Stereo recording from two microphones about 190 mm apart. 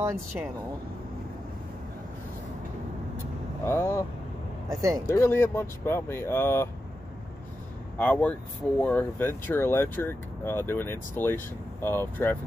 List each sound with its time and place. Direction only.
0.0 s speech: 15° right (ahead or behind)
3.6 s speech: 15° left (ahead or behind)
4.6 s speech: 15° right (ahead or behind)
5.0 s speech: 15° left (ahead or behind)
8.0 s speech: 5° left (ahead or behind)